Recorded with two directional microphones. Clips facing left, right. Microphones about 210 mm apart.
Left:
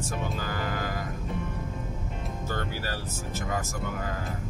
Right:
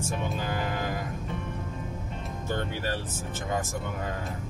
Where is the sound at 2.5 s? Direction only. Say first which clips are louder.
Right 4 dB; 25° right (ahead or behind).